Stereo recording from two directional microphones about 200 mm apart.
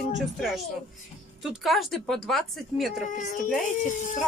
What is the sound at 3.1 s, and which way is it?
Speech, 40° left (ahead or behind).